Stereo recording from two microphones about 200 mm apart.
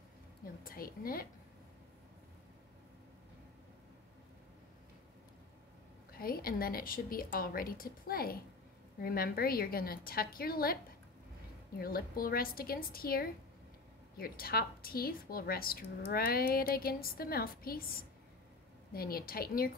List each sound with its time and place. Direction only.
0.7 s a woman's voice: 45° left (ahead or behind)
6.1 s a woman's voice: 45° left (ahead or behind)
11.8 s a woman's voice: 50° left (ahead or behind)